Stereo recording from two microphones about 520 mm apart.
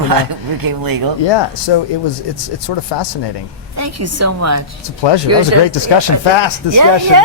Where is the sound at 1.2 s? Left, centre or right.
Left.